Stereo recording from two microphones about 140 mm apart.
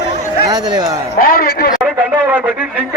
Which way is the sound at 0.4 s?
30° right (ahead or behind).